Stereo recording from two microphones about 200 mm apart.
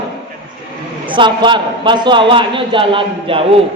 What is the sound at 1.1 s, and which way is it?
A man's voice, 25° right (ahead or behind).